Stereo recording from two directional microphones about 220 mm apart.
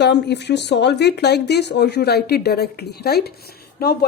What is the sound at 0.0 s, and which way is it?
Speech, 50° left (ahead or behind).